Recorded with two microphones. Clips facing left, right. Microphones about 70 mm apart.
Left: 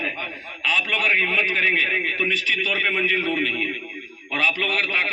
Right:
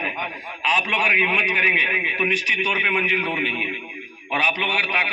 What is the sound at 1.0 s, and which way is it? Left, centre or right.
A man's voice, centre.